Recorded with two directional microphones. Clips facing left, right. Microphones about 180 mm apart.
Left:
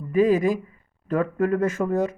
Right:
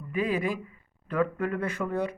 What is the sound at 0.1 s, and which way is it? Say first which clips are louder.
Speech: left 9 dB; 40° left (ahead or behind).